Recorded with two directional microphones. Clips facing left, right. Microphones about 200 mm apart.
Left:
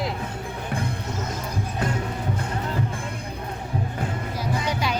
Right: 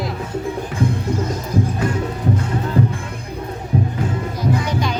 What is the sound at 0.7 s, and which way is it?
Music, 55° left (ahead or behind).